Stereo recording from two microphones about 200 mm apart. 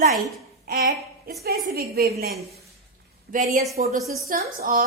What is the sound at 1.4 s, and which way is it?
Speech, 50° right (ahead or behind).